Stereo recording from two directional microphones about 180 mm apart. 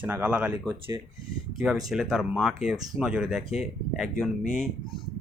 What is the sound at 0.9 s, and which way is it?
Speech, 20° right (ahead or behind).